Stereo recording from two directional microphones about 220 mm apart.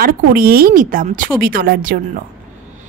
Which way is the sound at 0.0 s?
45° right (ahead or behind).